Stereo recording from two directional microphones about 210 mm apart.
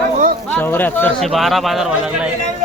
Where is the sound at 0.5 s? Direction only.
10° left (ahead or behind).